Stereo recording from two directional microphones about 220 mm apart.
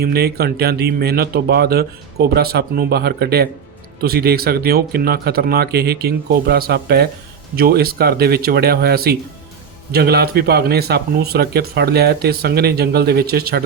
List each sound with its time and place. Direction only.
0.0 s speech: 45° right (ahead or behind)